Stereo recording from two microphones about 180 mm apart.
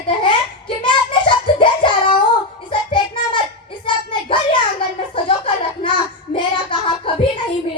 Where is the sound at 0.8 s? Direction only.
25° left (ahead or behind).